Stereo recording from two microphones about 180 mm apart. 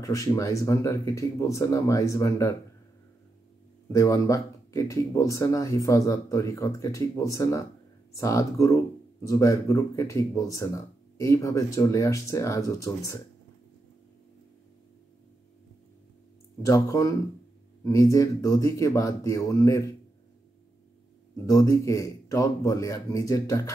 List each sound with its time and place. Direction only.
0.0 s speech: 15° left (ahead or behind)
3.9 s speech: 20° left (ahead or behind)
16.6 s speech: 20° left (ahead or behind)
21.5 s speech: 20° left (ahead or behind)